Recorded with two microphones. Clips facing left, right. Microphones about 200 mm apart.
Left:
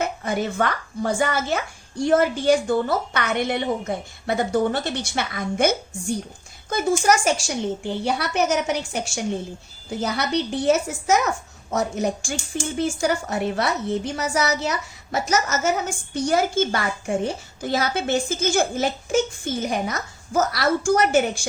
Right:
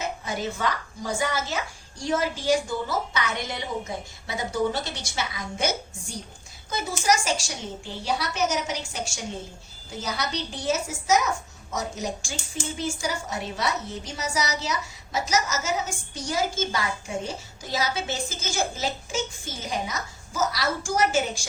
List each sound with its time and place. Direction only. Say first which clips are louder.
0.0 s speech: left 6 dB; 60° left (ahead or behind)